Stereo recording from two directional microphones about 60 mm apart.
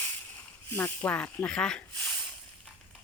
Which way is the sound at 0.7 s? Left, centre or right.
Left.